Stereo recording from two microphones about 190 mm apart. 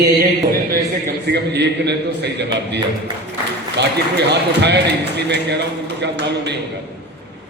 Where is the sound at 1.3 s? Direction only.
65° right (ahead or behind).